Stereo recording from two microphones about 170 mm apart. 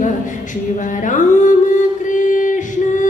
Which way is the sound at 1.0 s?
45° left (ahead or behind).